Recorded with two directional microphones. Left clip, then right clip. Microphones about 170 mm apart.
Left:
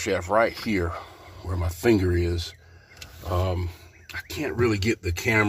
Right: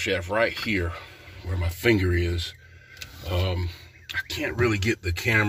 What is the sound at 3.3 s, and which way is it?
Speech, 10° left (ahead or behind).